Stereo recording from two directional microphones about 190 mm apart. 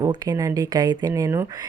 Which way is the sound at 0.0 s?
20° right (ahead or behind).